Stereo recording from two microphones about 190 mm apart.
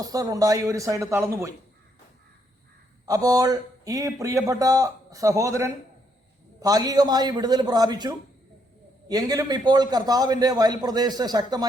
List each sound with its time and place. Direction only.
0.0 s speech: 20° right (ahead or behind)
3.1 s a man's voice: 20° right (ahead or behind)